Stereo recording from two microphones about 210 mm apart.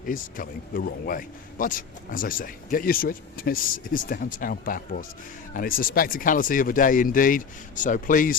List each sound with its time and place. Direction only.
0.0 s a man's voice: 40° left (ahead or behind)